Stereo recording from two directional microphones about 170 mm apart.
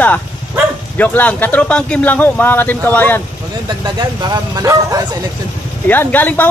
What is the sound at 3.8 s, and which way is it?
Speech, 25° right (ahead or behind).